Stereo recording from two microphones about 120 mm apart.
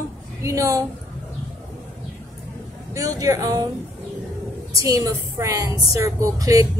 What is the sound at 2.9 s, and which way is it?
Speech, 30° right (ahead or behind).